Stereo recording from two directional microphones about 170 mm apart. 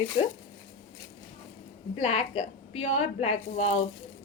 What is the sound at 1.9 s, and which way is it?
A woman's voice, 35° left (ahead or behind).